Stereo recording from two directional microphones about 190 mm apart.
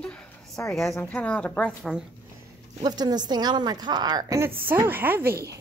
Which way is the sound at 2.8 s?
20° right (ahead or behind).